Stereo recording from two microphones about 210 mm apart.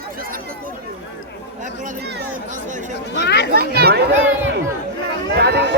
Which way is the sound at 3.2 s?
50° left (ahead or behind).